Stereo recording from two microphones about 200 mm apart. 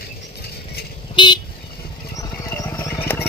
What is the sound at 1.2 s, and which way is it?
Vehicle, 25° left (ahead or behind).